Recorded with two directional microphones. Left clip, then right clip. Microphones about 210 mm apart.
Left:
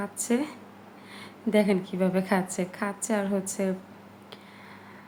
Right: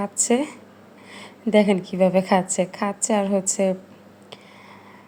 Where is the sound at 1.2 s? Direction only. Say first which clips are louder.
Right 6 dB; 20° right (ahead or behind).